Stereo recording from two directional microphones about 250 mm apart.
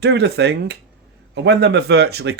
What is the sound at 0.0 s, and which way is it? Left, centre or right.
Speech, right.